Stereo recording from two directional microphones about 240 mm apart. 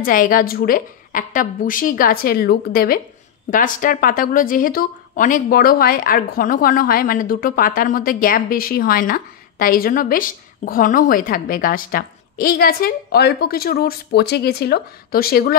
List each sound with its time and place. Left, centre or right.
0.0 s speech: left